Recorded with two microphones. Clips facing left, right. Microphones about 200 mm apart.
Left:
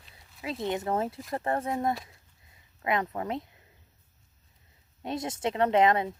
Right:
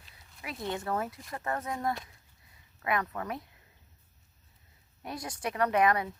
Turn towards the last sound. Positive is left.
turn(degrees=25)  # may be behind; listen again after turning